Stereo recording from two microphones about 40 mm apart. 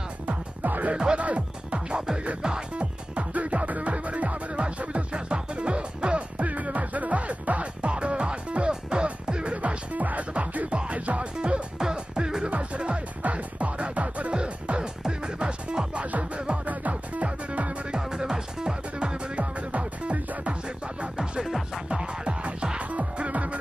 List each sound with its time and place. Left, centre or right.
0.3 s music: right
1.1 s speech: right
2.4 s music: right
11.3 s music: right
12.4 s music: right
16.0 s music: right
17.9 s music: centre; by 20.2 s right
21.2 s music: centre
21.8 s music: right